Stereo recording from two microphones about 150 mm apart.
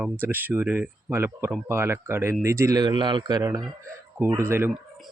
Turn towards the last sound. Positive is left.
turn(degrees=-15)  # may be behind; listen again after turning